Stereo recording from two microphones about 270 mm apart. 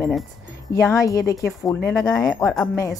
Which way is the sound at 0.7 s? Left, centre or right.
Centre.